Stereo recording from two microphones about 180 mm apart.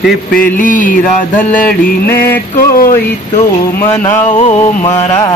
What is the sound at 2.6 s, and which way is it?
Mantra, 50° left (ahead or behind).